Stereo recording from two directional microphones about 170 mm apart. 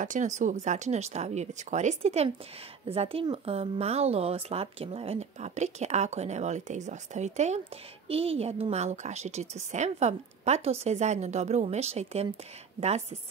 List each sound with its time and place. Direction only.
0.0 s speech: 45° right (ahead or behind)